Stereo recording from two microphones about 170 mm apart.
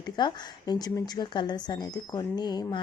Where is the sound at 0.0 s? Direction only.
25° left (ahead or behind).